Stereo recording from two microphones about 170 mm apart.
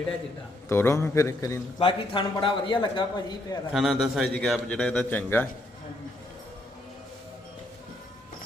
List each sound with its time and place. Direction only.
0.7 s a man's voice: 15° left (ahead or behind)
1.8 s a man's voice: 30° left (ahead or behind)
3.7 s a man's voice: centre (ahead or behind)